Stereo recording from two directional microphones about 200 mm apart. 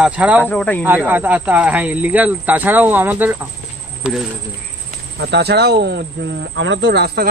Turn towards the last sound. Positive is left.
turn(degrees=-50)  # may be behind; listen again after turning